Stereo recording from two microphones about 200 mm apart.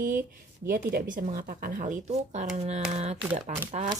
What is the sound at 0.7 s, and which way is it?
Speech, 45° right (ahead or behind).